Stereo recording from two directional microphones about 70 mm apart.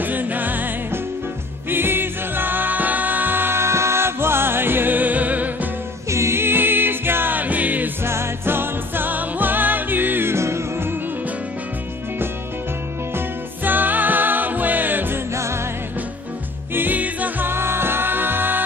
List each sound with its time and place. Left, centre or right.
0.0 s music: right
1.7 s music: right
6.0 s music: right
8.0 s music: right
13.7 s music: right
15.3 s music: right
16.7 s music: right